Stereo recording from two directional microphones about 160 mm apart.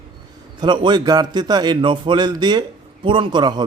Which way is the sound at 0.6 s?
30° right (ahead or behind).